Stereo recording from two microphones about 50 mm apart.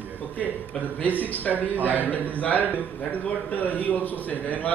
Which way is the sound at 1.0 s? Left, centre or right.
Left.